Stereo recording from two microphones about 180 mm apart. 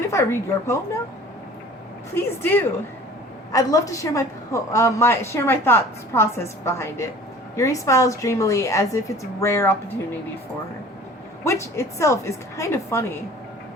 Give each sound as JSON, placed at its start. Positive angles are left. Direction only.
{"t": 0.1, "sound": "a woman's voice", "side_deg": 15}
{"t": 2.1, "sound": "a woman's voice", "side_deg": 10}
{"t": 11.4, "sound": "a woman's voice", "side_deg": 15}